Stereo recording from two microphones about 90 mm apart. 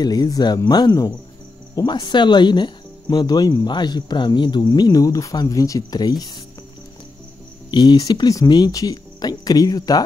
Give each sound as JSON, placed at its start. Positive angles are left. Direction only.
{"t": 0.0, "sound": "speech", "side_deg": 45}
{"t": 2.0, "sound": "speech", "side_deg": 60}
{"t": 7.7, "sound": "speech", "side_deg": 55}